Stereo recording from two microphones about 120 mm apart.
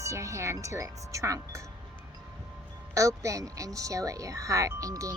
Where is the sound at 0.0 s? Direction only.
25° right (ahead or behind).